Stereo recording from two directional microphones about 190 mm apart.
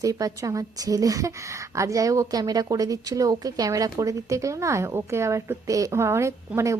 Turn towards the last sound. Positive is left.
turn(degrees=-15)  # may be behind; listen again after turning